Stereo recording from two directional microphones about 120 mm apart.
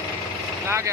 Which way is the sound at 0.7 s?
25° right (ahead or behind).